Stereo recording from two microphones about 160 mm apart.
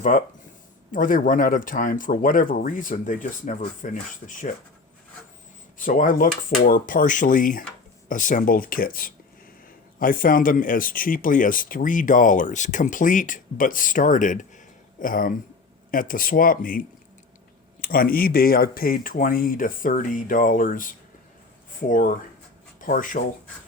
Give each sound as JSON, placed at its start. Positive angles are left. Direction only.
{"t": 0.1, "sound": "speech", "side_deg": 55}
{"t": 5.7, "sound": "speech", "side_deg": 60}